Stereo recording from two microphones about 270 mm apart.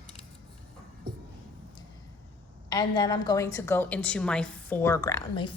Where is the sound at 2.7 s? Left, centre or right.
Centre.